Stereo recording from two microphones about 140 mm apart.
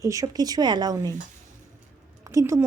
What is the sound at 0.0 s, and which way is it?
Speech, 25° right (ahead or behind).